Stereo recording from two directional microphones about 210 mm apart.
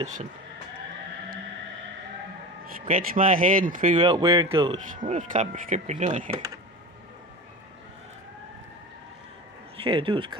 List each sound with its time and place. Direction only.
2.8 s speech: 40° right (ahead or behind)
3.9 s speech: 25° right (ahead or behind)
4.9 s speech: 35° right (ahead or behind)
9.8 s speech: 25° right (ahead or behind)